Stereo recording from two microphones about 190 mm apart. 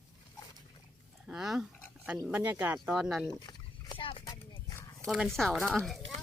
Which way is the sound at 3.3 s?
25° left (ahead or behind).